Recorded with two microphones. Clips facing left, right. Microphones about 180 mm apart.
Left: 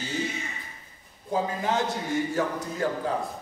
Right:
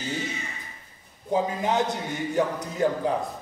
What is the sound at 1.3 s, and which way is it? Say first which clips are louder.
A man's voice: right 2 dB; 20° right (ahead or behind).